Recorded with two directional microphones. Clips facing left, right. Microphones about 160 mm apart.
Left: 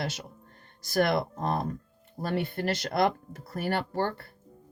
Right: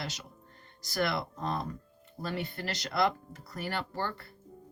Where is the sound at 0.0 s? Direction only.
55° left (ahead or behind).